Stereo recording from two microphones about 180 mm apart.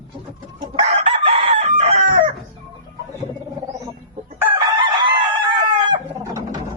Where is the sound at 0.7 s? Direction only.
30° right (ahead or behind).